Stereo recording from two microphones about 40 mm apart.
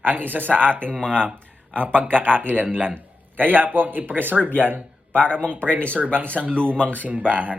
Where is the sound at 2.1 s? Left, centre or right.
Left.